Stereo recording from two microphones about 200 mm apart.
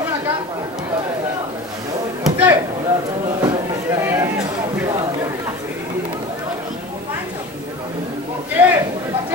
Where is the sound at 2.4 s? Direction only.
20° right (ahead or behind).